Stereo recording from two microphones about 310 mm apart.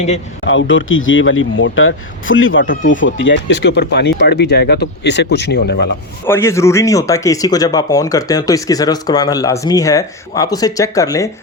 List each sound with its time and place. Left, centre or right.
0.4 s speech: left
6.2 s speech: centre